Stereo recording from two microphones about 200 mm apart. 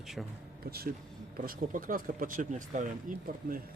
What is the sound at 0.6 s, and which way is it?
Speech, 50° right (ahead or behind).